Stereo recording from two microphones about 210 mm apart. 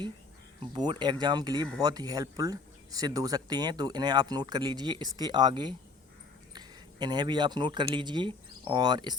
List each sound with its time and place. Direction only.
0.7 s speech: 20° right (ahead or behind)